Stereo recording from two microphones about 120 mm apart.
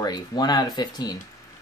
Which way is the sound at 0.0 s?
35° left (ahead or behind).